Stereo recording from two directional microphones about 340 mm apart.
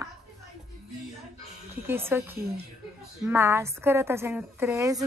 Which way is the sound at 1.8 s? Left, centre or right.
Centre.